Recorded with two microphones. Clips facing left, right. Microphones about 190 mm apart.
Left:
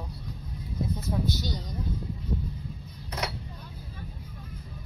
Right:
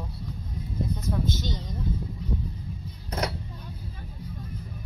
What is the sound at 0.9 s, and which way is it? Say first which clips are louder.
Speech: even; 20° right (ahead or behind).